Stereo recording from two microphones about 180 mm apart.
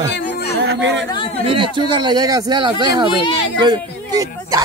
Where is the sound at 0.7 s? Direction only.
80° right.